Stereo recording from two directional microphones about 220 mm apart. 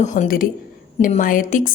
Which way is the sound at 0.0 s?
35° left (ahead or behind).